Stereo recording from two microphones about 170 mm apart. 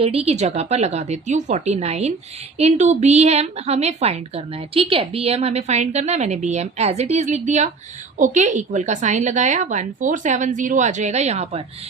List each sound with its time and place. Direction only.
0.0 s a woman's voice: 35° right (ahead or behind)